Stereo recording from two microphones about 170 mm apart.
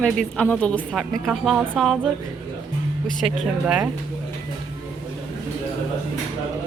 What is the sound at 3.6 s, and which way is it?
Speech, 5° right (ahead or behind).